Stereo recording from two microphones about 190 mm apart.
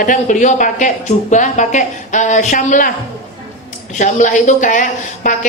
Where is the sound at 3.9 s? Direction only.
40° left (ahead or behind).